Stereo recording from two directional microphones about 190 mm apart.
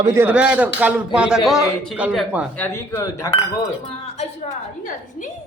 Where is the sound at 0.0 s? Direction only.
15° right (ahead or behind).